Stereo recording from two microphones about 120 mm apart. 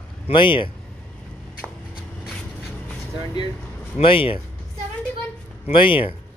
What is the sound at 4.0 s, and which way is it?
Speech, 50° left (ahead or behind).